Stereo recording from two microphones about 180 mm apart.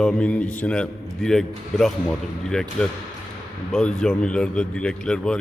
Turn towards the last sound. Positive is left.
turn(degrees=5)  # may be behind; listen again after turning